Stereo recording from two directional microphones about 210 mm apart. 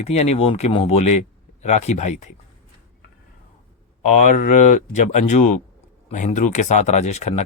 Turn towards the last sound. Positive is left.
turn(degrees=30)  # may be behind; listen again after turning